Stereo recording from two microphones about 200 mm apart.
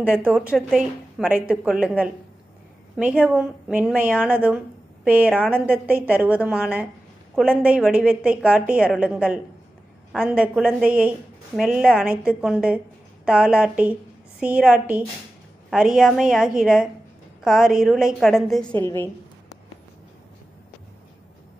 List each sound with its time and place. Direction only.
0.0 s a woman's voice: 5° right (ahead or behind); by 19.0 s 10° left (ahead or behind)